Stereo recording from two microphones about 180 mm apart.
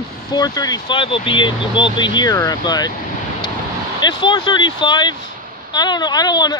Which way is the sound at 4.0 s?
25° left (ahead or behind).